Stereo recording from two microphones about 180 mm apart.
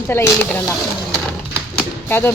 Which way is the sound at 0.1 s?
10° left (ahead or behind).